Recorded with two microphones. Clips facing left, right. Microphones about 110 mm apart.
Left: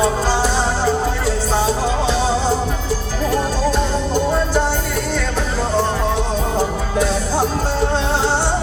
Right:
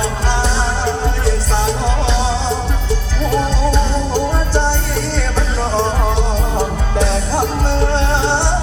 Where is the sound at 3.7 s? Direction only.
30° right (ahead or behind).